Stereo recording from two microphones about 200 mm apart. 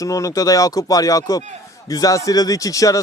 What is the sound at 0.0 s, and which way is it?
Speech, 15° left (ahead or behind).